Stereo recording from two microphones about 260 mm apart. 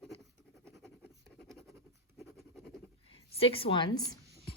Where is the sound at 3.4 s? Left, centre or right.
Left.